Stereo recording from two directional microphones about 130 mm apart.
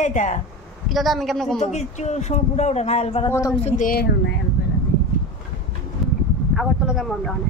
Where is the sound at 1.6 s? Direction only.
60° left (ahead or behind).